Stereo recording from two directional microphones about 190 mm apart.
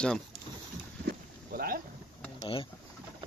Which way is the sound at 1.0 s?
50° right (ahead or behind).